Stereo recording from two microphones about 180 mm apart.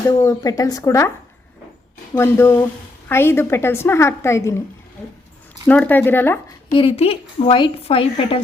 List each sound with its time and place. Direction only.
0.1 s speech: 20° left (ahead or behind)
2.1 s a woman's voice: 15° left (ahead or behind)
5.6 s a woman's voice: 10° left (ahead or behind)
6.7 s a woman's voice: 30° left (ahead or behind)